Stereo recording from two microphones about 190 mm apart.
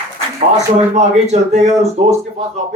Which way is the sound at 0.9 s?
35° right (ahead or behind).